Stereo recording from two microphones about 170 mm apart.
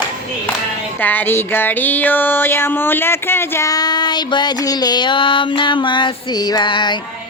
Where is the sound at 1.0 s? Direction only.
10° left (ahead or behind); by 7.0 s 25° left (ahead or behind).